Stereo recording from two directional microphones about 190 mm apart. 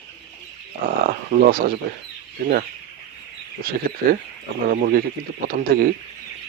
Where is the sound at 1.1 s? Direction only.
50° right (ahead or behind).